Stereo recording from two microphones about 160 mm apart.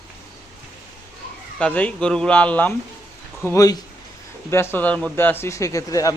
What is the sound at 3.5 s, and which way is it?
Speech, 20° left (ahead or behind).